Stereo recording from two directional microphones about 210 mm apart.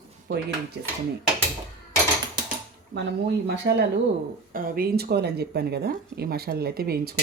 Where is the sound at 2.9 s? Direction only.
55° right (ahead or behind).